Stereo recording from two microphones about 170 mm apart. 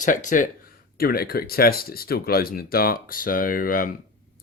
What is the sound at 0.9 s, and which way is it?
Speech, 60° left (ahead or behind).